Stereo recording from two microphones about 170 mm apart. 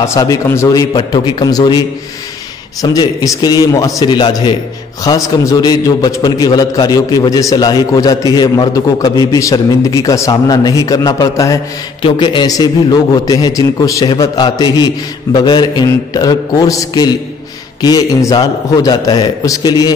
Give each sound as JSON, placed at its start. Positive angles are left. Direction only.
{"t": 0.0, "sound": "a man's voice", "side_deg": 20}
{"t": 2.8, "sound": "a man's voice", "side_deg": 20}
{"t": 12.0, "sound": "a man's voice", "side_deg": 30}